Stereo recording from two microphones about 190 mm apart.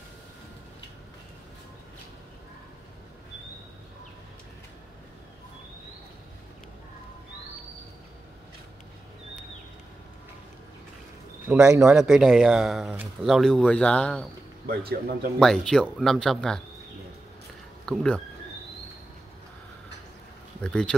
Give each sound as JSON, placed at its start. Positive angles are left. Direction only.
{"t": 11.4, "sound": "a man's voice", "side_deg": -15}
{"t": 12.0, "sound": "speech", "side_deg": 0}
{"t": 14.9, "sound": "speech", "side_deg": -55}
{"t": 15.3, "sound": "speech", "side_deg": 5}
{"t": 17.8, "sound": "speech", "side_deg": 5}
{"t": 20.6, "sound": "speech", "side_deg": 5}